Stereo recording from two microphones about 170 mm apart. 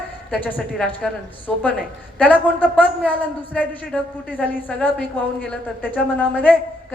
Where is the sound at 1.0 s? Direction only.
5° left (ahead or behind).